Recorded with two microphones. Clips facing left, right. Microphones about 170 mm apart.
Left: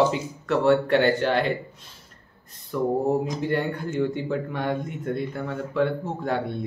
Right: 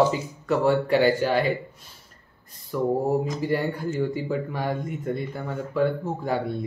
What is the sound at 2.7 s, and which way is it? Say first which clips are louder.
Speech: even; 5° right (ahead or behind).